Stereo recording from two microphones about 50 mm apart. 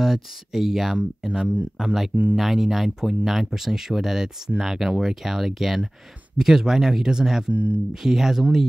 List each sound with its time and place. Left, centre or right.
0.0 s speech: centre
7.5 s speech: right
7.9 s speech: centre